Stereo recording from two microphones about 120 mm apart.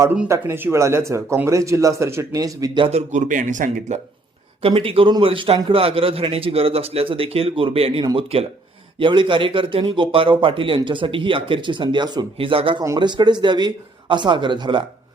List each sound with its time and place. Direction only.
0.3 s speech: 20° right (ahead or behind)
2.9 s a man's voice: 85° right
4.6 s a man's voice: 50° right (ahead or behind)